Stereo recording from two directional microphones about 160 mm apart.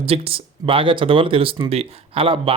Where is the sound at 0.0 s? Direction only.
35° right (ahead or behind).